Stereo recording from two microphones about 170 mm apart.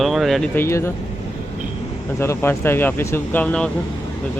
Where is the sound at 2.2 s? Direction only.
15° left (ahead or behind).